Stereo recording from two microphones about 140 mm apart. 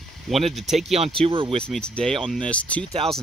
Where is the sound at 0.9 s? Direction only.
45° right (ahead or behind).